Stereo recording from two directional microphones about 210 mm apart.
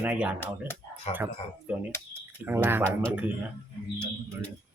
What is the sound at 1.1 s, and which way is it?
Speech, 30° left (ahead or behind).